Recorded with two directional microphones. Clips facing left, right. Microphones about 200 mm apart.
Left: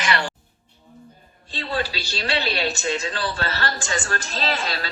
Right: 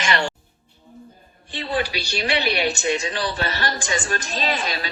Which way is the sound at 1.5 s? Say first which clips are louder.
Right 2 dB; 15° right (ahead or behind).